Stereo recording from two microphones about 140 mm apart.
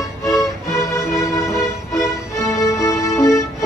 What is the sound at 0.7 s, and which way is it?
Music, 20° left (ahead or behind).